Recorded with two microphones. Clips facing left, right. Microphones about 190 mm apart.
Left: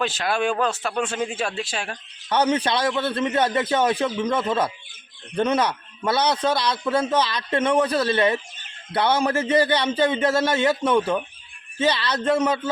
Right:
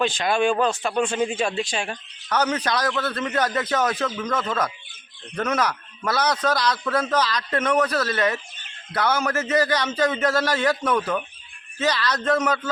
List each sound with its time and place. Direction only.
0.0 s speech: 5° left (ahead or behind)
2.3 s a man's voice: 30° left (ahead or behind)